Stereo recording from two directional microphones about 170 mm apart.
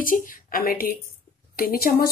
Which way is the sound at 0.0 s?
55° left (ahead or behind).